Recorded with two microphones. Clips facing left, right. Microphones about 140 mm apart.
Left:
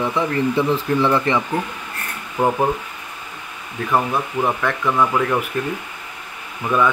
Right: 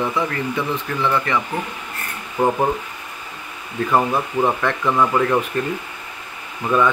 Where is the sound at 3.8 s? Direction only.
5° right (ahead or behind).